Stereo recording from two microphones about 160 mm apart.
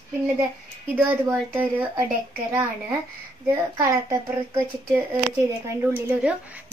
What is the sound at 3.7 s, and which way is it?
Speech, 20° right (ahead or behind).